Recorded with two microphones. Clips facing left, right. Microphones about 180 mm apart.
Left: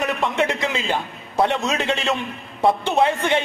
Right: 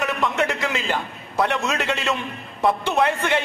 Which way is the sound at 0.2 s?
20° left (ahead or behind).